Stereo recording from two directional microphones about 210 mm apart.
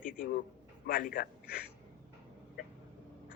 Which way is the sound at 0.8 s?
45° left (ahead or behind).